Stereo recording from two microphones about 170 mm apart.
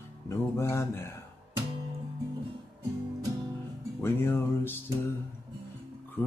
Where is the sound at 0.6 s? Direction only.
15° left (ahead or behind).